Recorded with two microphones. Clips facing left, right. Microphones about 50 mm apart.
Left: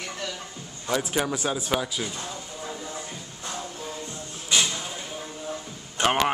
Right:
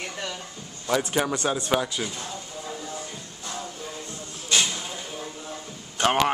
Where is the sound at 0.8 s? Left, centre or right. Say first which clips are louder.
Right 2 dB; centre.